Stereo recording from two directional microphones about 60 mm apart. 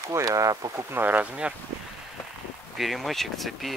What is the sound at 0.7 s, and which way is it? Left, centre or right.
Speech, right.